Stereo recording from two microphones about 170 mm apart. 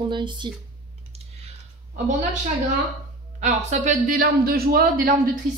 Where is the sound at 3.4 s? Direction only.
45° right (ahead or behind).